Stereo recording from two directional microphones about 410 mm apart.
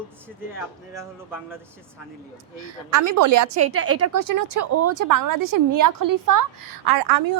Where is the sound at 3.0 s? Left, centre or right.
Right.